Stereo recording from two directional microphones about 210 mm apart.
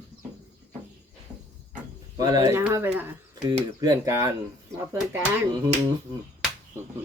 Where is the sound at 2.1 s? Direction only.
15° right (ahead or behind).